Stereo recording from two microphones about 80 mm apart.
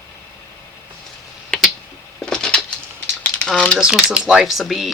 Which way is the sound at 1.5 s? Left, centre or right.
Centre.